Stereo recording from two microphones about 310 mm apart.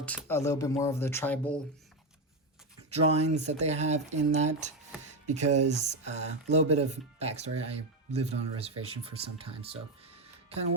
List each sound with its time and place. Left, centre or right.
0.0 s speech: centre
3.1 s speech: right